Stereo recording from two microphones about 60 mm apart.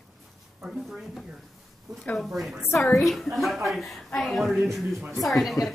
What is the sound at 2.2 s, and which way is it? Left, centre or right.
A woman's voice, centre.